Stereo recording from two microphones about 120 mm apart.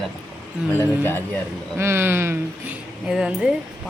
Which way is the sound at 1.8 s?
20° right (ahead or behind).